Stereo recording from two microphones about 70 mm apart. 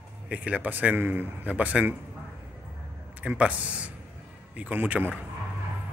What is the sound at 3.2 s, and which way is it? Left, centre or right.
Speech, centre.